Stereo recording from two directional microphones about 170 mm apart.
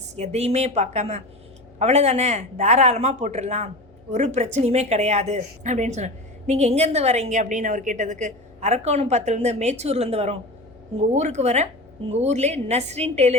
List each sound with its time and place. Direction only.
0.2 s a woman's voice: 40° right (ahead or behind)